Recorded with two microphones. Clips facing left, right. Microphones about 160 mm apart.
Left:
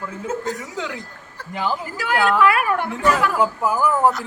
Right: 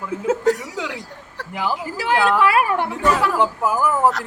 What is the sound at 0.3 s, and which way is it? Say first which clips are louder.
A woman's voice: right 8 dB; 85° right.